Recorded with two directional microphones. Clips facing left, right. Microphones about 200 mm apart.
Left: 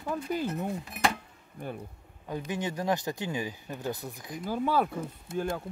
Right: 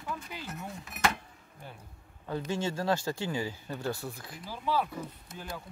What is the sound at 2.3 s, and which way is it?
Speech, 15° left (ahead or behind).